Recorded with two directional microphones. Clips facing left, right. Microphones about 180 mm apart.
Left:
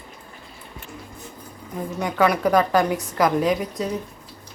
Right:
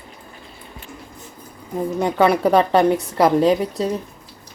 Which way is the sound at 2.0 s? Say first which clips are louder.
Right 3 dB; 30° right (ahead or behind).